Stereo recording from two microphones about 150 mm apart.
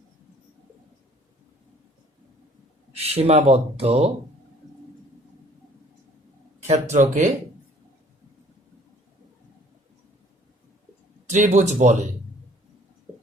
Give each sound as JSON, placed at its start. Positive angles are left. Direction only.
{"t": 2.9, "sound": "speech", "side_deg": -45}
{"t": 6.9, "sound": "speech", "side_deg": -55}
{"t": 11.3, "sound": "speech", "side_deg": -50}